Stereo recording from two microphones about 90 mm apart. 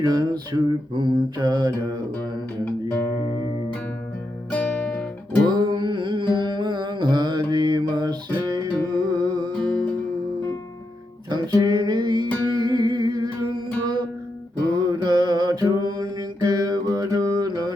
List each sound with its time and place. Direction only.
0.0 s mantra: 50° right (ahead or behind)
4.5 s guitar: 15° left (ahead or behind)
5.5 s music: 55° right (ahead or behind)
11.3 s music: 55° right (ahead or behind)